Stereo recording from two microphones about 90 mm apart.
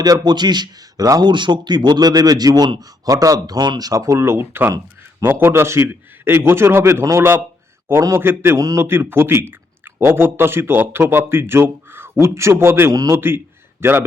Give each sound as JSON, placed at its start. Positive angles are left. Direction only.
{"t": 0.0, "sound": "a man's voice", "side_deg": -50}
{"t": 1.2, "sound": "a man's voice", "side_deg": -60}
{"t": 3.1, "sound": "a man's voice", "side_deg": -40}
{"t": 8.5, "sound": "a man's voice", "side_deg": -40}